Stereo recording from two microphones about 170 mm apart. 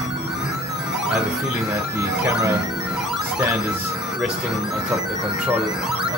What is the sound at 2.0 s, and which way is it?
Speech, 20° right (ahead or behind).